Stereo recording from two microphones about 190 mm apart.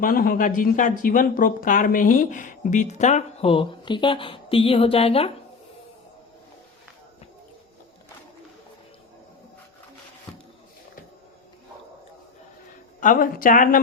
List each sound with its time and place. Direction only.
0.0 s speech: 50° left (ahead or behind); by 5.3 s 30° left (ahead or behind)
13.0 s a woman's voice: 45° left (ahead or behind)